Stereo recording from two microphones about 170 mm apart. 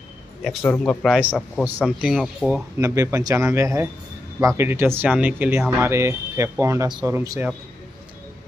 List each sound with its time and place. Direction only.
0.4 s speech: centre (ahead or behind)
2.8 s speech: 20° right (ahead or behind)